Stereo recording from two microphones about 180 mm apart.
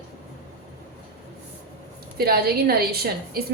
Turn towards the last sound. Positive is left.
turn(degrees=-60)  # may be behind; listen again after turning